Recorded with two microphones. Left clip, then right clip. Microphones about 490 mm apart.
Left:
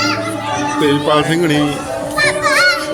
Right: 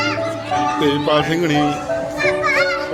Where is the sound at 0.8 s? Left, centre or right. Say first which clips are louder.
Left 6 dB; right.